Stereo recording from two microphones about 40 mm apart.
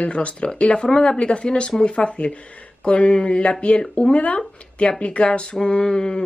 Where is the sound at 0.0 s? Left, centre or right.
Left.